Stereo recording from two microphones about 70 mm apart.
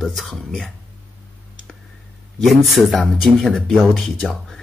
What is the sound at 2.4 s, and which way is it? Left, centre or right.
Speech, centre.